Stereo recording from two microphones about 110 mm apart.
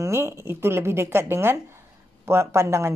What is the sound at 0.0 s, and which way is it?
Speech, 25° right (ahead or behind).